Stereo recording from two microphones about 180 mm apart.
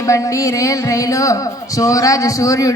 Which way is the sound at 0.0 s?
15° left (ahead or behind).